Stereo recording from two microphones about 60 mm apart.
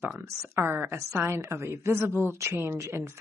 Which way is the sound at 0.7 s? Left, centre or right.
Right.